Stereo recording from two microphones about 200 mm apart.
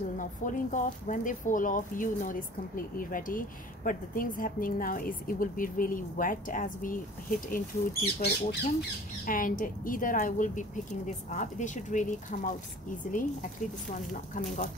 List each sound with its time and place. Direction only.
0.2 s speech: 40° left (ahead or behind)
13.8 s speech: 40° left (ahead or behind)